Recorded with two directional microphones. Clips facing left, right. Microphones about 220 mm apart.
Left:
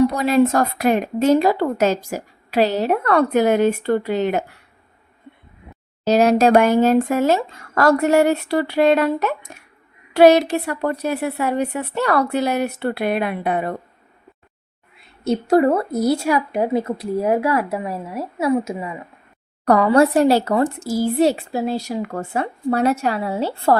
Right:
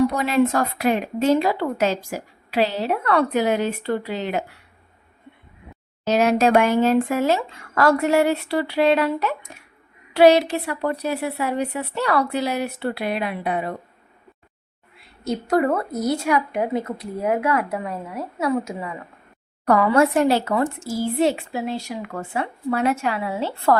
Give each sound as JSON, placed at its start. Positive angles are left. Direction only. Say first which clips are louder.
{"t": 0.1, "sound": "a woman's voice", "louder": "left 3 dB", "side_deg": 35}
{"t": 6.1, "sound": "a woman's voice", "louder": "left 4 dB", "side_deg": 35}
{"t": 15.2, "sound": "speech", "louder": "left 5 dB", "side_deg": 30}
{"t": 19.6, "sound": "speech", "louder": "left 3 dB", "side_deg": 35}